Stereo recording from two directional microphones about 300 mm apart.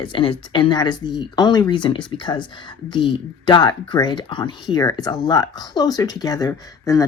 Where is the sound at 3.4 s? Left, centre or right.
Centre.